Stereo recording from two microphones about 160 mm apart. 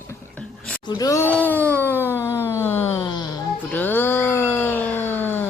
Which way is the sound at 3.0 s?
25° left (ahead or behind).